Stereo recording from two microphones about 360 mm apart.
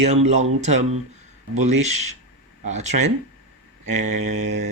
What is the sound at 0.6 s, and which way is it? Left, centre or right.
Mantra, right.